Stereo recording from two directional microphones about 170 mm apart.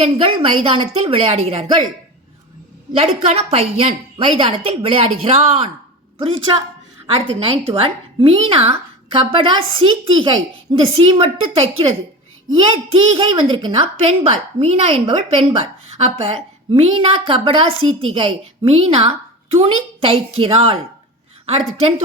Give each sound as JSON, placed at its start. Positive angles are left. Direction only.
{"t": 0.0, "sound": "a woman's voice", "side_deg": -35}
{"t": 2.9, "sound": "a woman's voice", "side_deg": -40}
{"t": 12.5, "sound": "a woman's voice", "side_deg": -30}